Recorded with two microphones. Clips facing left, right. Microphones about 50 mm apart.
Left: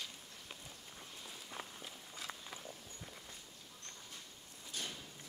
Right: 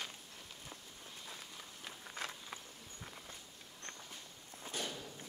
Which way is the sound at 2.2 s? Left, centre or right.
Right.